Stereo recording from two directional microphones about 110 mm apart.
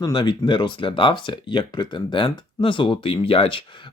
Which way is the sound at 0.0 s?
40° left (ahead or behind).